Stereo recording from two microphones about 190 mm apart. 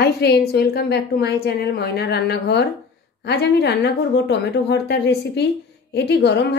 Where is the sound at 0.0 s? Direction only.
60° left (ahead or behind).